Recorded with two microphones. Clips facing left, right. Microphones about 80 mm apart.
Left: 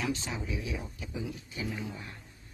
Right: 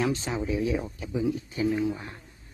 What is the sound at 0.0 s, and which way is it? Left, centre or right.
Speech, right.